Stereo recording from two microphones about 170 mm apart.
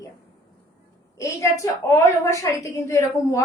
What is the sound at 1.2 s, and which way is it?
A woman's voice, 20° left (ahead or behind).